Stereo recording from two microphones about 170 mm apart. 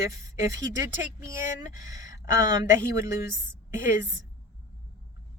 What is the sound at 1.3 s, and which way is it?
Speech, 20° right (ahead or behind).